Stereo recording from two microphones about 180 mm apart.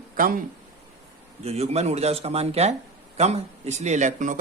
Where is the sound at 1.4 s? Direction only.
35° right (ahead or behind).